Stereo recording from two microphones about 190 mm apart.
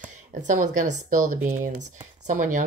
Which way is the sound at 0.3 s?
40° right (ahead or behind).